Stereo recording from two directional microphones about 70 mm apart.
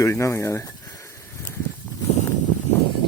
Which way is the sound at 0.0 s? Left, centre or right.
Left.